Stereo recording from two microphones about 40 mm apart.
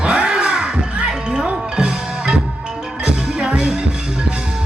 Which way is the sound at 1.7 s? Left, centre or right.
Centre.